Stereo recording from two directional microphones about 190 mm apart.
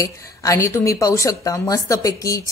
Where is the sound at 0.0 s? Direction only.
15° left (ahead or behind).